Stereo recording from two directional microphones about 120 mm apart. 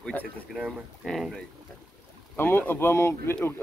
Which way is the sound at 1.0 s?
Centre (ahead or behind).